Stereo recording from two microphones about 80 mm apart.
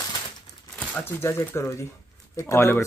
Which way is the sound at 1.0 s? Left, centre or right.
Left.